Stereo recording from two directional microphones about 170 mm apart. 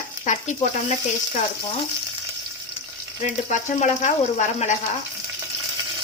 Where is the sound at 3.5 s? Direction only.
45° left (ahead or behind).